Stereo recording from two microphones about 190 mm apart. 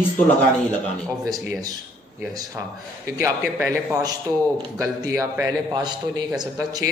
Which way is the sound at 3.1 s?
15° right (ahead or behind).